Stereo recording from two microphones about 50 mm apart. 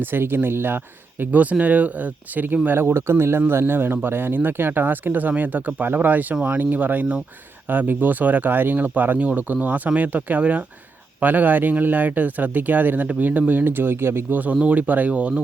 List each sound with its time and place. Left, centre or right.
0.0 s speech: right
1.2 s speech: right
2.6 s speech: right
14.3 s speech: right